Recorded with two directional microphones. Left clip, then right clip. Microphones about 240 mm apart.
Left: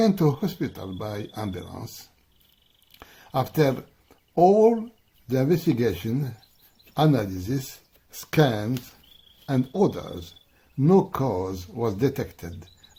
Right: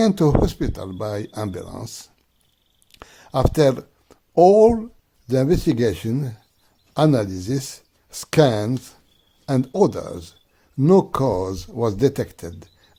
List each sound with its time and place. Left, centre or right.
0.0 s speech: right
3.0 s a sound: right
5.3 s speech: right